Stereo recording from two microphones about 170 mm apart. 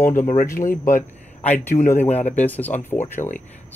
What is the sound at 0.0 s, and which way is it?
A man's voice, 15° left (ahead or behind).